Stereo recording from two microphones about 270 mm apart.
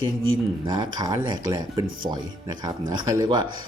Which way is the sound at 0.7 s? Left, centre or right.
Centre.